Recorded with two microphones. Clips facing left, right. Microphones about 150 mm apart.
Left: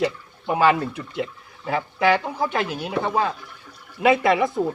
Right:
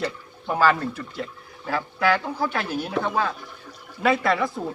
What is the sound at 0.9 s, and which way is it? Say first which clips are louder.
Speech: left 4 dB; 20° left (ahead or behind).